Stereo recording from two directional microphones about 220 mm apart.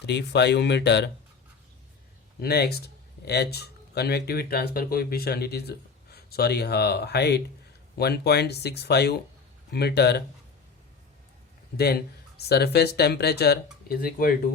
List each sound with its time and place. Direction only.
0.0 s speech: 50° left (ahead or behind)
2.4 s speech: 45° left (ahead or behind)
12.4 s speech: 45° left (ahead or behind)